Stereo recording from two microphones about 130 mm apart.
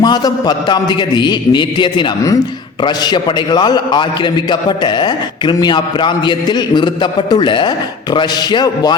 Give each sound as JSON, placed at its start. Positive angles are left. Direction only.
{"t": 0.0, "sound": "a man's voice", "side_deg": 30}